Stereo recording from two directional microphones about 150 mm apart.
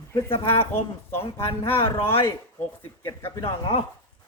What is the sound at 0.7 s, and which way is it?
A woman's voice, 15° left (ahead or behind).